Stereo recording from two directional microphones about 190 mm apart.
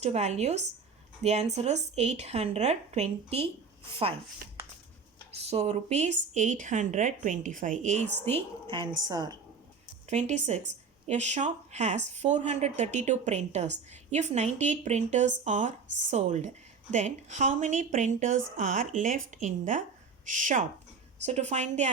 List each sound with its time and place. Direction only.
0.0 s speech: 35° right (ahead or behind)
5.5 s a woman's voice: 35° right (ahead or behind)
10.1 s speech: 40° right (ahead or behind)